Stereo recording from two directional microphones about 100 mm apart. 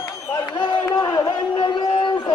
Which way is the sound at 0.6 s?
50° left (ahead or behind).